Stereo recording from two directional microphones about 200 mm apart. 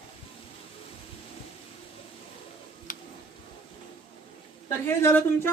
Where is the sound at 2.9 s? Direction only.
40° left (ahead or behind).